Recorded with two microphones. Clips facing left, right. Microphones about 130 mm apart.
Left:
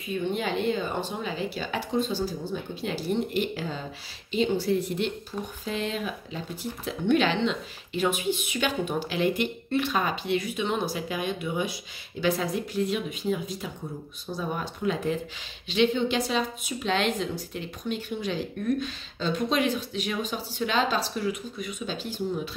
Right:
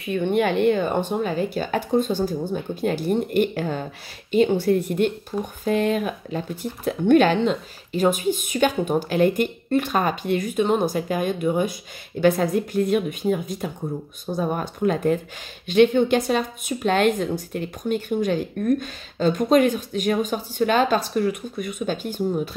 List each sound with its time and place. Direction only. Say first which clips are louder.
0.0 s speech: right 8 dB; 65° right (ahead or behind)